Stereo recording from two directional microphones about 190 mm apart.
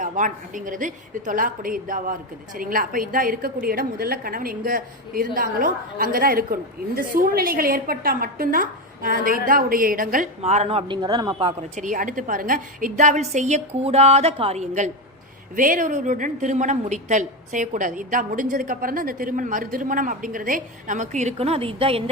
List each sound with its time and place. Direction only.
0.0 s a woman's voice: 45° right (ahead or behind); by 11.5 s 25° right (ahead or behind)
11.8 s a woman's voice: 45° right (ahead or behind)